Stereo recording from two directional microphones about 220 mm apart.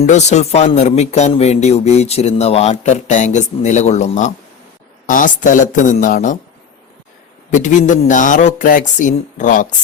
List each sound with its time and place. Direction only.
0.0 s speech: 30° left (ahead or behind)
7.5 s speech: 35° left (ahead or behind)